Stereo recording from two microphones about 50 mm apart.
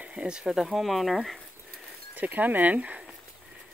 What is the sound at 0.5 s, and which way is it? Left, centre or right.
Speech, centre.